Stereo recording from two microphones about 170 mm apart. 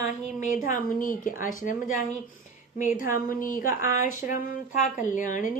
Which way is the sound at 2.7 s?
50° left (ahead or behind).